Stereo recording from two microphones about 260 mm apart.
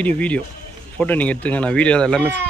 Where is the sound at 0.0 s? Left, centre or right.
Centre.